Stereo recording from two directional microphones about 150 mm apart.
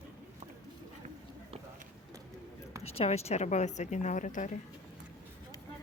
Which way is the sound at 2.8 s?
45° left (ahead or behind).